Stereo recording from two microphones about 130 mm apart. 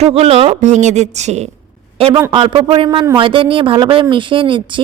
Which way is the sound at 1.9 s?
45° right (ahead or behind).